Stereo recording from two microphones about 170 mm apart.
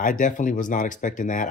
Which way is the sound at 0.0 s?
50° left (ahead or behind).